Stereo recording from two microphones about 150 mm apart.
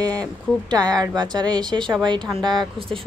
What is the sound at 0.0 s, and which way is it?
Speech, 25° right (ahead or behind).